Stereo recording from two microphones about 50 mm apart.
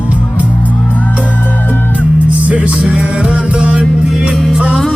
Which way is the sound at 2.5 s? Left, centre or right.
Right.